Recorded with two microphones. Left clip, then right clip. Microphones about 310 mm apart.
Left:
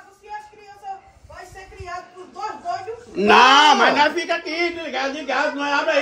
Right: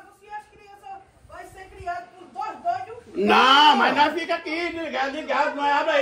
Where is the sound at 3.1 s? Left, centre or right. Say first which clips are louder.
Left 4 dB; left.